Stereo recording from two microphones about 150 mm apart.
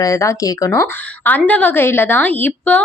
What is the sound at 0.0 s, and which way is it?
A woman's voice, 20° left (ahead or behind).